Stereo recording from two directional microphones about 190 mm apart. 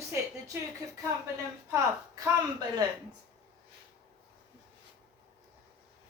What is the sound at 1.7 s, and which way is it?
Speech, 20° right (ahead or behind).